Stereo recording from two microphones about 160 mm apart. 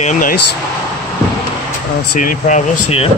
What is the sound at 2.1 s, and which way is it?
Speech, 55° left (ahead or behind).